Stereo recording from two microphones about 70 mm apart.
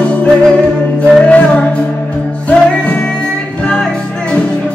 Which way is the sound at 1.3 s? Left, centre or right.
Centre.